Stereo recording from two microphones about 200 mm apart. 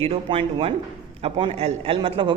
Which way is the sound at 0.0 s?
30° right (ahead or behind).